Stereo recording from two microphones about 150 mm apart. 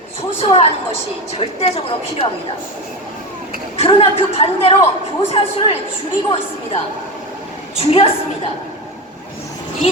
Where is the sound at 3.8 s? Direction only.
40° left (ahead or behind).